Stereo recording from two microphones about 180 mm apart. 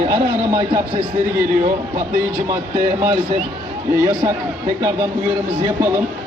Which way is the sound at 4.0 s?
15° right (ahead or behind).